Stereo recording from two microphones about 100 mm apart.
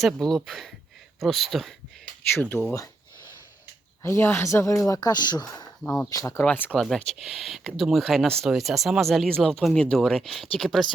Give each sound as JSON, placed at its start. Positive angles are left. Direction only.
{"t": 0.0, "sound": "speech", "side_deg": 5}
{"t": 2.3, "sound": "speech", "side_deg": 20}
{"t": 4.0, "sound": "speech", "side_deg": 25}
{"t": 5.8, "sound": "speech", "side_deg": 15}
{"t": 6.1, "sound": "speech", "side_deg": 35}
{"t": 6.4, "sound": "speech", "side_deg": 15}